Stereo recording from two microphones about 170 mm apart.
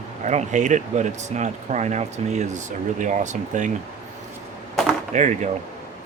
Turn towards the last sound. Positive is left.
turn(degrees=-45)  # may be behind; listen again after turning